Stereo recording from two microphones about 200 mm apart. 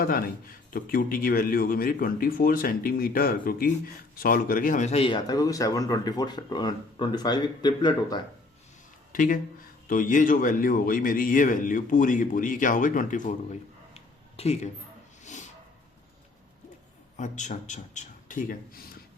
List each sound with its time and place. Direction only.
0.0 s a man's voice: 45° left (ahead or behind); by 8.2 s 20° left (ahead or behind)
9.1 s a man's voice: 45° left (ahead or behind)
15.2 s a sound: 35° left (ahead or behind)
17.2 s a man's voice: 35° left (ahead or behind)